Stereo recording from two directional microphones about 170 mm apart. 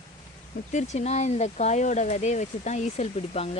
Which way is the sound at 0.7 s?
45° left (ahead or behind).